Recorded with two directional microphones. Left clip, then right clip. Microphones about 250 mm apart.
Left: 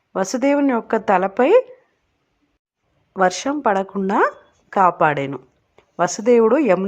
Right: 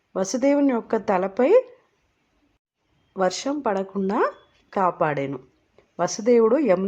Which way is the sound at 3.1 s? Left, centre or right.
Centre.